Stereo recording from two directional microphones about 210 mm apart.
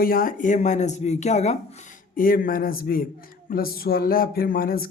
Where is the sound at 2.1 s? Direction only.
40° left (ahead or behind).